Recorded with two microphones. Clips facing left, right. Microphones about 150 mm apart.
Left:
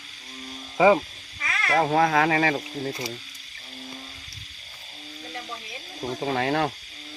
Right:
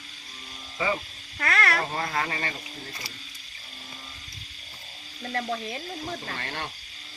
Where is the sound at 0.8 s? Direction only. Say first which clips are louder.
Left 11 dB; 90° left.